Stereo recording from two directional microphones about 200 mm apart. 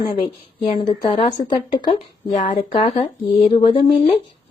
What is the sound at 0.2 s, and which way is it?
A woman's voice, 25° left (ahead or behind).